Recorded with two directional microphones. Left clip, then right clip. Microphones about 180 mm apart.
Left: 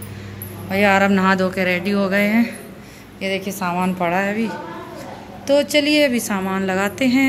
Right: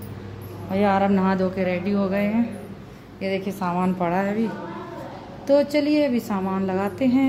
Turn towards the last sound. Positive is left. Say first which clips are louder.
# left 4 dB
turn(degrees=-5)  # may be behind; listen again after turning